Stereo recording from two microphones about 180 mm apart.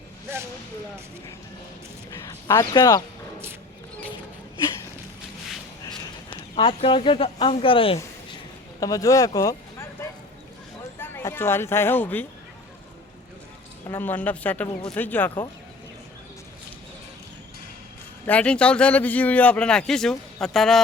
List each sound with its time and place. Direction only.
2.0 s a sound: 20° left (ahead or behind)
6.3 s speech: 30° left (ahead or behind)
8.8 s speech: 20° left (ahead or behind)
10.9 s speech: 10° left (ahead or behind)
13.8 s speech: 10° left (ahead or behind)
18.3 s a man's voice: 5° left (ahead or behind)